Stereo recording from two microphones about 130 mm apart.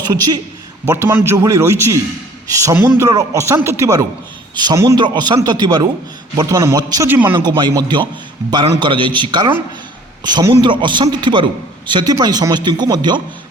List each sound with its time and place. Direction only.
0.0 s a man's voice: 30° right (ahead or behind)
0.9 s a man's voice: 20° right (ahead or behind)
7.1 s speech: 15° right (ahead or behind)
7.3 s a man's voice: 35° right (ahead or behind)
8.8 s a man's voice: 40° right (ahead or behind)
10.5 s a man's voice: 40° right (ahead or behind)